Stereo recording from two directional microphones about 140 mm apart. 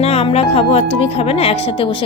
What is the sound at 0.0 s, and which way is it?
A woman's voice, 50° left (ahead or behind).